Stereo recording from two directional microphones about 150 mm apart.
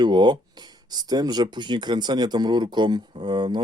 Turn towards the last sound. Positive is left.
turn(degrees=-30)  # may be behind; listen again after turning